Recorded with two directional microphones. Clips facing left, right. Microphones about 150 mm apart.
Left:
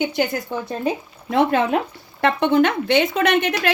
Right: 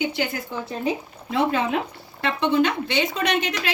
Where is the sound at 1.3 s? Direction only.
55° left (ahead or behind).